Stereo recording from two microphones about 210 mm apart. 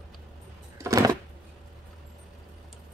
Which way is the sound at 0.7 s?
15° right (ahead or behind).